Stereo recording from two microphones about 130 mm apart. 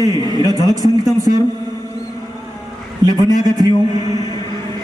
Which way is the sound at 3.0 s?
30° right (ahead or behind).